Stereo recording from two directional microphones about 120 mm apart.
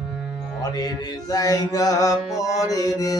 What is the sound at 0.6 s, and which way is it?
Music, 30° left (ahead or behind).